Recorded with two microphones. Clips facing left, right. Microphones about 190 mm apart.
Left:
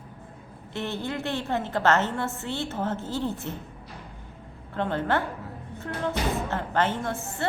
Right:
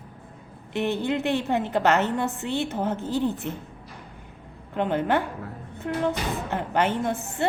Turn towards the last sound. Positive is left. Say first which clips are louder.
# right 4 dB
turn(degrees=-15)  # may be behind; listen again after turning